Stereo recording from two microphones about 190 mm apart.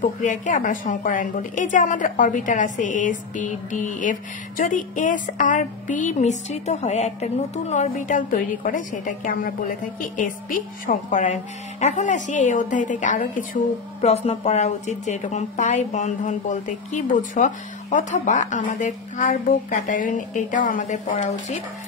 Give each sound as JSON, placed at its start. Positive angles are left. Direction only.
{"t": 0.0, "sound": "a woman's voice", "side_deg": 40}
{"t": 14.0, "sound": "a woman's voice", "side_deg": 30}